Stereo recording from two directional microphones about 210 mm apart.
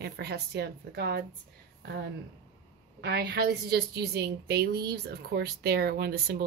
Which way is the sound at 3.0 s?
50° right (ahead or behind).